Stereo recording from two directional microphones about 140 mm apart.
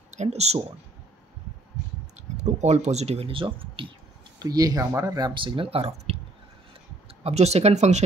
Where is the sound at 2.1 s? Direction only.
55° right (ahead or behind); by 3.9 s 40° right (ahead or behind).